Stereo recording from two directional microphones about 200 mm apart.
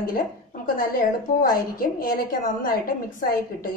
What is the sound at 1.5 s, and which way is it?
A woman's voice, 45° left (ahead or behind).